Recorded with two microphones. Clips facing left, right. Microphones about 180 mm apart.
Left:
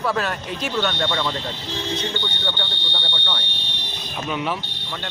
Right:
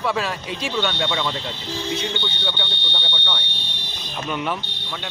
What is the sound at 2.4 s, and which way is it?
Speech, 15° right (ahead or behind).